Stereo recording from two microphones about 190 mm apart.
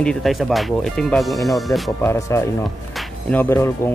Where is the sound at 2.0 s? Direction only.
15° left (ahead or behind).